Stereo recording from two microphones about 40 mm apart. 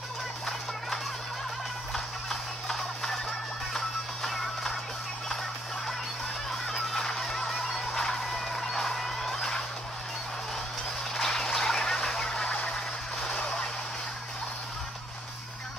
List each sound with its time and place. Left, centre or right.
2.2 s music: centre
7.0 s music: centre
11.1 s a sound: centre
13.3 s vehicle: left